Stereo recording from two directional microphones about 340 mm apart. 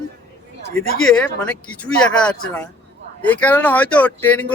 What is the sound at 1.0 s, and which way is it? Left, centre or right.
Speech, centre.